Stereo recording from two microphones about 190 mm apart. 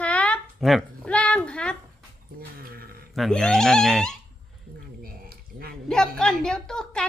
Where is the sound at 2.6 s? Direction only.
50° right (ahead or behind).